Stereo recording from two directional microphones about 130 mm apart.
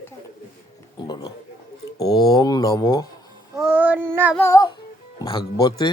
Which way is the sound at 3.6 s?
10° right (ahead or behind).